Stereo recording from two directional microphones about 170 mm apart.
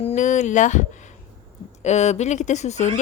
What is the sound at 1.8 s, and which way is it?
Speech, 40° left (ahead or behind).